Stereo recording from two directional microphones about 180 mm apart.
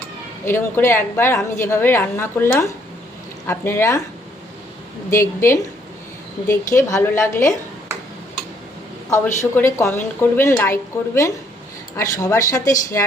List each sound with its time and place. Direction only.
0.4 s a woman's voice: 15° left (ahead or behind)
5.1 s a woman's voice: 15° left (ahead or behind)
9.0 s a woman's voice: 15° left (ahead or behind)